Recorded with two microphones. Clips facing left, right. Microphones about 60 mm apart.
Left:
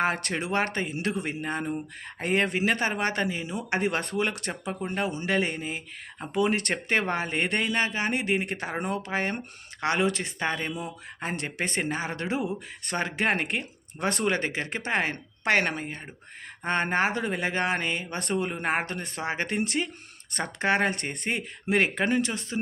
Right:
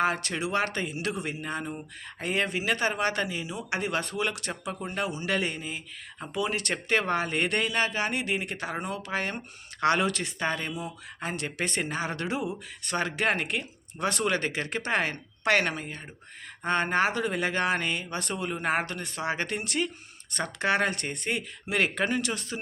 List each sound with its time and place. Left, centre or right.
0.0 s speech: left
9.8 s a woman's voice: left